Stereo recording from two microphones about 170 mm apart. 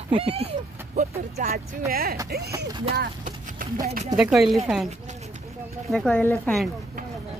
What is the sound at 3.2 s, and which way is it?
Clip-clop, 50° right (ahead or behind).